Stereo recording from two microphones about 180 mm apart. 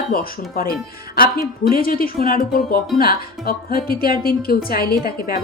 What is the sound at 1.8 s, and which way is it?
A woman's voice, 55° left (ahead or behind).